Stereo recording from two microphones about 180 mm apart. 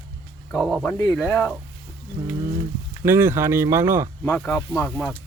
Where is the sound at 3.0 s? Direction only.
15° right (ahead or behind).